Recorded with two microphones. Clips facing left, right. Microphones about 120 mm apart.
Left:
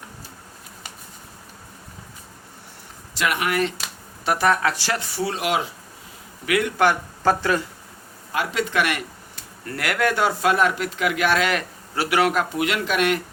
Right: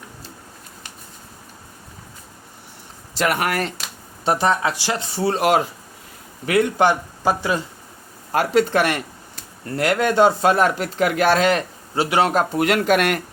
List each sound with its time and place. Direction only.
3.2 s speech: 40° right (ahead or behind)
4.3 s speech: 25° right (ahead or behind); by 5.7 s 45° right (ahead or behind)
6.4 s speech: 30° right (ahead or behind)
7.2 s speech: 15° right (ahead or behind)
8.3 s speech: 40° right (ahead or behind)